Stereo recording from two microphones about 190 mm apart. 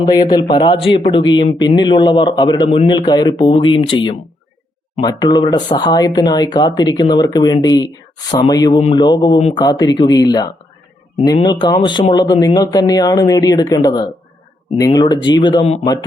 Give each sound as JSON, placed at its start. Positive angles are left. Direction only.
{"t": 0.0, "sound": "speech", "side_deg": 20}
{"t": 5.0, "sound": "speech", "side_deg": 20}